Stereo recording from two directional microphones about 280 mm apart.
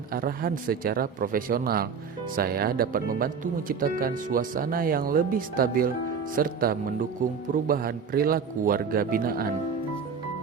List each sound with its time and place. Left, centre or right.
0.1 s speech: right